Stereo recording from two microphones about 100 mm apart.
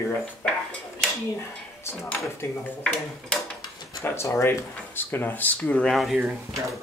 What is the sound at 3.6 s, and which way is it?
Drawer open or close, 45° left (ahead or behind).